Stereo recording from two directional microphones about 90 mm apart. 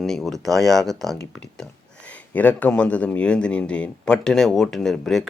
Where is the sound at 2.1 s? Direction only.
15° left (ahead or behind).